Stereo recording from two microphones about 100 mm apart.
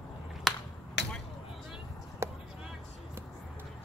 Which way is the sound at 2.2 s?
25° right (ahead or behind).